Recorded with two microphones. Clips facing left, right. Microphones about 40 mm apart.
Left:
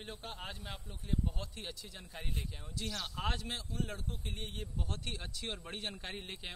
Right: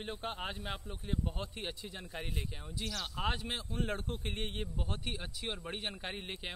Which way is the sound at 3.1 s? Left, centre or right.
Centre.